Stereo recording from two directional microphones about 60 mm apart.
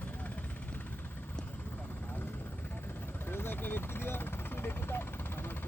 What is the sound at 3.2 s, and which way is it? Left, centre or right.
Vehicle, left.